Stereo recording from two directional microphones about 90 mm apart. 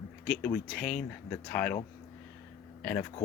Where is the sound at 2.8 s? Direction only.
20° left (ahead or behind).